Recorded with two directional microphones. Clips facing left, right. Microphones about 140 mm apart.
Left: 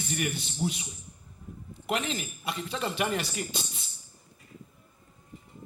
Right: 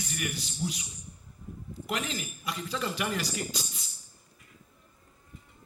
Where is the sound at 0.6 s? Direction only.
55° left (ahead or behind).